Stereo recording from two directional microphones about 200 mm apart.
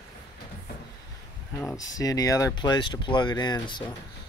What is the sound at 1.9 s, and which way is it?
Speech, 20° left (ahead or behind).